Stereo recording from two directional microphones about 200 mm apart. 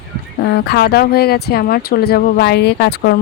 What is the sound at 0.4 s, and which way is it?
Speech, 55° left (ahead or behind).